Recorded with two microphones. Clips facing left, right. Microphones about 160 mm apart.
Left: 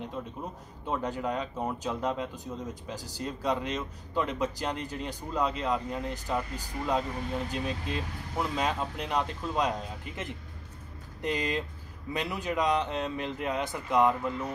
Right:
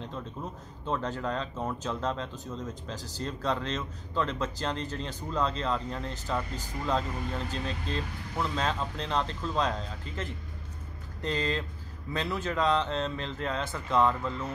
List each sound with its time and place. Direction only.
0.8 s speech: 15° left (ahead or behind)